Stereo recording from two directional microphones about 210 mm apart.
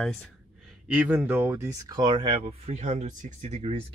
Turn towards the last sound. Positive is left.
turn(degrees=-30)  # may be behind; listen again after turning